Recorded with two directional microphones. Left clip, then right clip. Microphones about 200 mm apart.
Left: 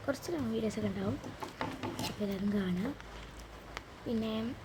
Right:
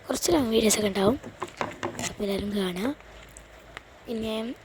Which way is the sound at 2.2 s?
55° right (ahead or behind).